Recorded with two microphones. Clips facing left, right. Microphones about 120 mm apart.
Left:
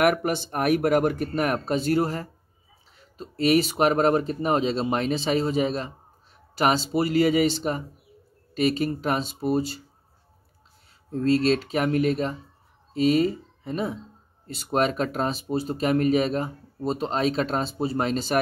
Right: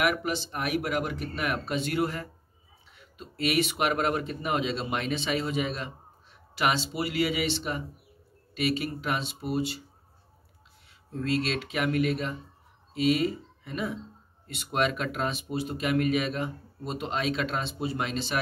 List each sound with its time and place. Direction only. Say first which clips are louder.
0.0 s speech: left 6 dB; 50° left (ahead or behind)
11.1 s speech: left 8 dB; 35° left (ahead or behind)